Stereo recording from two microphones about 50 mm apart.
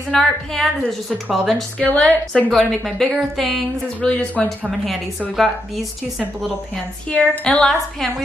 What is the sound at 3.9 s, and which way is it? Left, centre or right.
Speech, left.